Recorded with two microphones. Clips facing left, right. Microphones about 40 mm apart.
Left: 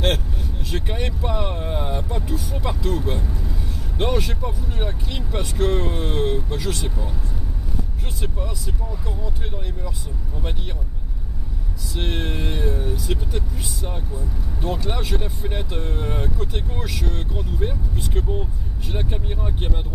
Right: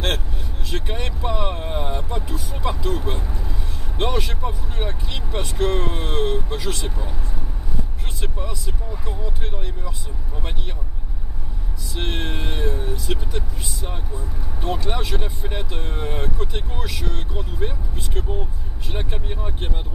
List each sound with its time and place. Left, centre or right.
0.7 s speech: centre
5.1 s speech: centre
8.9 s speech: centre
11.9 s speech: centre